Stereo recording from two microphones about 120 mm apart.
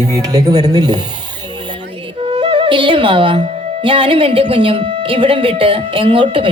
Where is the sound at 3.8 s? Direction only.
45° right (ahead or behind).